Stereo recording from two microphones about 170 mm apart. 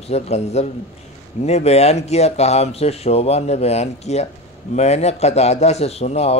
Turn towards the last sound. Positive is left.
turn(degrees=35)  # may be behind; listen again after turning